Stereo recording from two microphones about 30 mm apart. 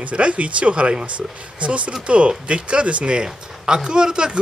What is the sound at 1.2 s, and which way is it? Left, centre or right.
Speech, right.